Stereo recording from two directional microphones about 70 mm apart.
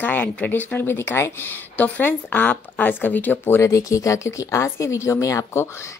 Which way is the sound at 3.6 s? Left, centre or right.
Left.